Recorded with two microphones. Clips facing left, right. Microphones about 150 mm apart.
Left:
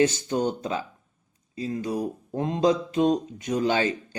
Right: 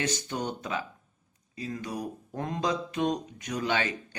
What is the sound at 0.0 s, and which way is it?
Speech, 30° left (ahead or behind).